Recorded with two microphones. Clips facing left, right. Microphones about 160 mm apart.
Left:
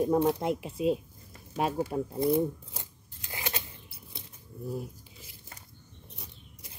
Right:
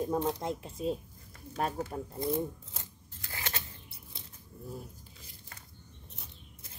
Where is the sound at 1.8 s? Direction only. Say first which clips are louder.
Left 7 dB; 10° left (ahead or behind).